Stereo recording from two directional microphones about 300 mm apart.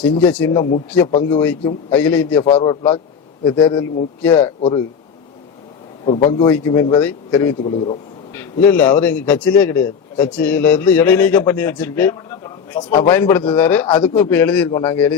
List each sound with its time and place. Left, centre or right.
0.0 s a man's voice: centre
2.4 s a man's voice: centre
6.1 s a man's voice: centre
13.8 s a man's voice: centre